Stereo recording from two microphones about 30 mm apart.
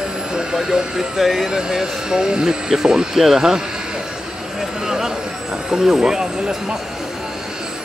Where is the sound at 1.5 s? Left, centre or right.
Right.